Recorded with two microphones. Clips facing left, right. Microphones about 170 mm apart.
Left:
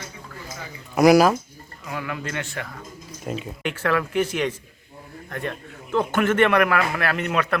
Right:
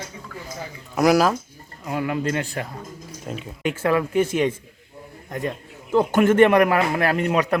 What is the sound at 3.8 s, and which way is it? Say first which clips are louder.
Speech: right 2 dB; 25° right (ahead or behind).